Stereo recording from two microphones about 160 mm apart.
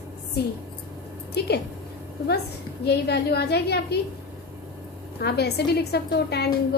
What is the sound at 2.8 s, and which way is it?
A woman's voice, 90° left.